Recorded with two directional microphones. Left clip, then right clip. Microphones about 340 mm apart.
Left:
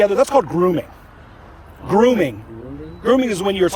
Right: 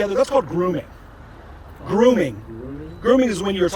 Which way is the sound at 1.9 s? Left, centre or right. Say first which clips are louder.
Left 2 dB; centre.